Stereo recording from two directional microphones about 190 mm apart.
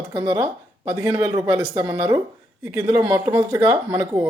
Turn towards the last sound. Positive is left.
turn(degrees=-20)  # may be behind; listen again after turning